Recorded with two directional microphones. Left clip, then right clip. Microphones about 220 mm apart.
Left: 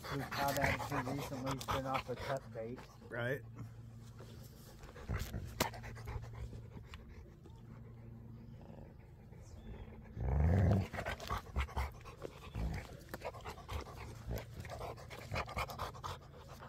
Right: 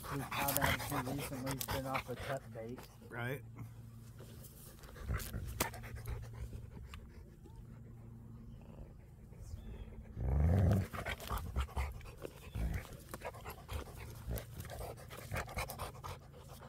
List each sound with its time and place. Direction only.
0.0 s dog: 5° left (ahead or behind)
0.3 s speech: 15° right (ahead or behind)
0.6 s speech: 25° right (ahead or behind)
1.7 s speech: centre (ahead or behind)
2.5 s speech: 10° right (ahead or behind)
4.9 s dog: 5° right (ahead or behind)
5.7 s pant: centre (ahead or behind)
10.1 s roar: centre (ahead or behind)
10.7 s dog: 5° right (ahead or behind)